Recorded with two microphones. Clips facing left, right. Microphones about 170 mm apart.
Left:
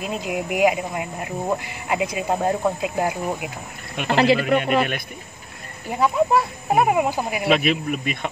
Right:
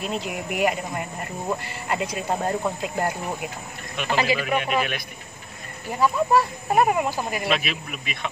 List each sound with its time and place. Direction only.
0.0 s speech: 10° left (ahead or behind)
3.9 s speech: 55° left (ahead or behind)
5.9 s speech: 15° left (ahead or behind)
7.4 s speech: 55° left (ahead or behind)